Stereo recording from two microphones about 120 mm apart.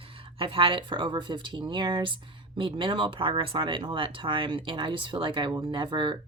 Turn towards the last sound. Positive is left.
turn(degrees=-40)  # may be behind; listen again after turning